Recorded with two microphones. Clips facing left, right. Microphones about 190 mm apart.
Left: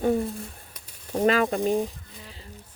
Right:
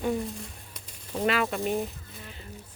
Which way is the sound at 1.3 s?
40° left (ahead or behind).